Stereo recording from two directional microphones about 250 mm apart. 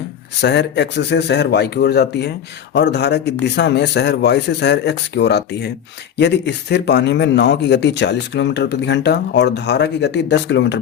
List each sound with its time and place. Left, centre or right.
0.4 s speech: left